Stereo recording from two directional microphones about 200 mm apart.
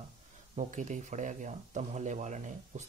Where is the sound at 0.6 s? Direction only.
40° right (ahead or behind).